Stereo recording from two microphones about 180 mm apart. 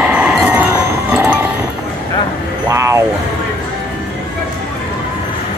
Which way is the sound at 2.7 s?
15° right (ahead or behind).